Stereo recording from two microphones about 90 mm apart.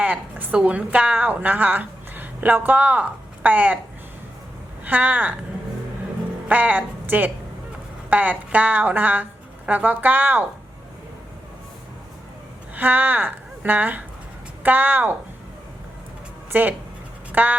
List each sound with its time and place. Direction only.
0.0 s a woman's voice: 15° right (ahead or behind)
4.9 s speech: 20° right (ahead or behind)
6.5 s a woman's voice: 20° right (ahead or behind)
12.7 s speech: 20° right (ahead or behind)
16.5 s speech: 20° right (ahead or behind)